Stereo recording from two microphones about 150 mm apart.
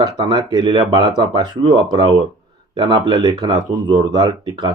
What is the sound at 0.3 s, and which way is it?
Speech, 30° right (ahead or behind).